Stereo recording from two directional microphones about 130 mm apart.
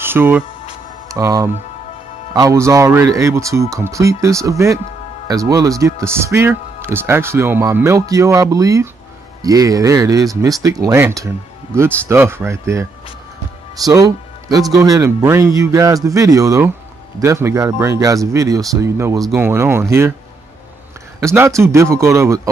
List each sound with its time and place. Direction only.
0.0 s speech: 15° right (ahead or behind)
1.0 s speech: 25° right (ahead or behind)
13.8 s speech: 25° right (ahead or behind)
21.2 s speech: 20° right (ahead or behind)